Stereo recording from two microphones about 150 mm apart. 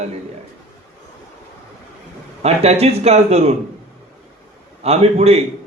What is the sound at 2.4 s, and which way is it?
A man's voice, 45° right (ahead or behind).